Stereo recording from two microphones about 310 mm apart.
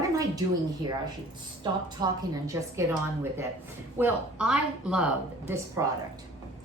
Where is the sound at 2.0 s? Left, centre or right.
Centre.